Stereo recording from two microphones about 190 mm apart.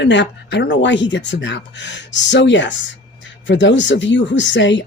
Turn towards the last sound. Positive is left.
turn(degrees=70)  # may be behind; listen again after turning